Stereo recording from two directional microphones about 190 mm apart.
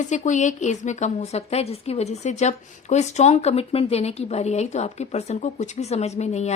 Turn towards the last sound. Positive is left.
turn(degrees=35)  # may be behind; listen again after turning